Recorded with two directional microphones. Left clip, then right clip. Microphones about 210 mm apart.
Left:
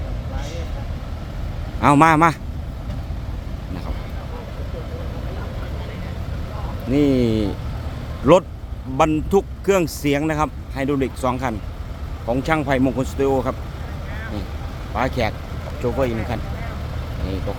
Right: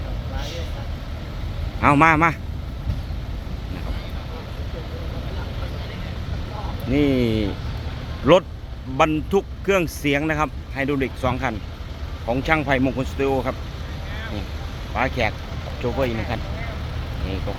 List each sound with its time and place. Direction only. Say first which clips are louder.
1.8 s a man's voice: left 2 dB; 15° left (ahead or behind)
6.9 s vehicle: left 2 dB; 15° left (ahead or behind)
9.0 s speech: left 2 dB; 10° left (ahead or behind)
14.9 s speech: even; 15° left (ahead or behind)